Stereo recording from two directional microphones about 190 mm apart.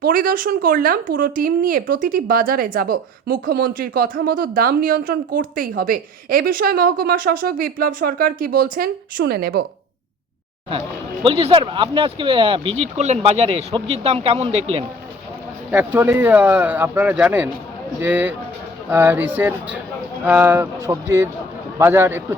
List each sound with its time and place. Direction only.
0.0 s speech: 50° right (ahead or behind)
10.7 s speech: 25° right (ahead or behind)
15.7 s speech: 10° right (ahead or behind)